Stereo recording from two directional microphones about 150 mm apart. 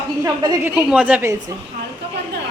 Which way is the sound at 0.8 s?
10° right (ahead or behind).